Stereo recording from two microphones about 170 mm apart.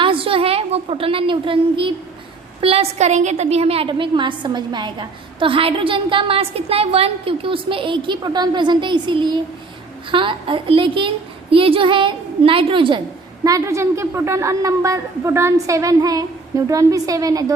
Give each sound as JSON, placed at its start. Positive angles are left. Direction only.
{"t": 0.0, "sound": "a woman's voice", "side_deg": -30}
{"t": 13.4, "sound": "a woman's voice", "side_deg": -20}